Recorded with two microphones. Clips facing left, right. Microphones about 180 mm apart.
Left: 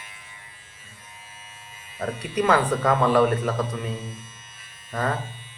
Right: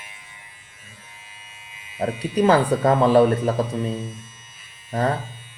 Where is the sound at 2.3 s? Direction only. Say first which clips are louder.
Right 4 dB; 30° right (ahead or behind).